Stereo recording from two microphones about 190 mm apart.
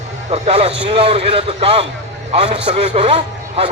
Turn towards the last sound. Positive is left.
turn(degrees=-30)  # may be behind; listen again after turning